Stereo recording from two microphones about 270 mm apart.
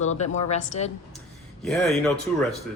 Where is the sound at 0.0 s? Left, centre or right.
Left.